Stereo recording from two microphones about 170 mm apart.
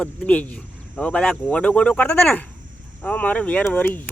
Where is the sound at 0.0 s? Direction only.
5° left (ahead or behind).